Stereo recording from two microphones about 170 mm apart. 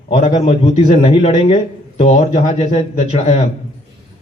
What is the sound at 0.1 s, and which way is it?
Speech, 40° left (ahead or behind).